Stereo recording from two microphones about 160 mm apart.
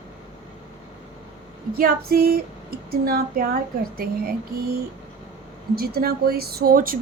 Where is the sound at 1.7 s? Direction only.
70° right (ahead or behind).